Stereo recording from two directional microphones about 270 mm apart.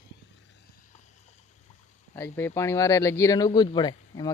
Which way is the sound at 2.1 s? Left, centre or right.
Centre.